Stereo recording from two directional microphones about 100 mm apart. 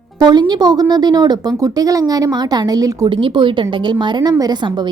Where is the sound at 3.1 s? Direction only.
55° right (ahead or behind).